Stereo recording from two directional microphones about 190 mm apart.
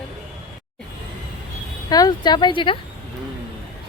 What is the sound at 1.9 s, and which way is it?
Speech, 20° left (ahead or behind).